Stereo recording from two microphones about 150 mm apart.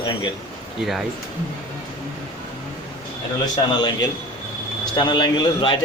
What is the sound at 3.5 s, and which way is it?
A man's voice, 30° left (ahead or behind).